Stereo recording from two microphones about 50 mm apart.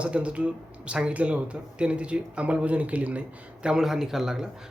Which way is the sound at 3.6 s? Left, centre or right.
Centre.